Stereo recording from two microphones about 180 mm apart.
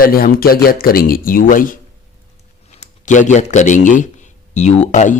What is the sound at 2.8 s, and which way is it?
Speech, 45° left (ahead or behind).